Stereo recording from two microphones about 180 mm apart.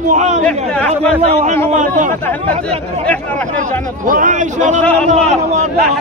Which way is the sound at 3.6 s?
45° right (ahead or behind).